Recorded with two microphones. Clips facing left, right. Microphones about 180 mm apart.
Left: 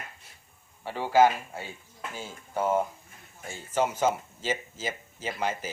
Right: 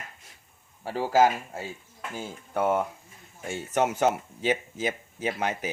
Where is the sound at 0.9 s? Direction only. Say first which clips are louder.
Even; 40° right (ahead or behind).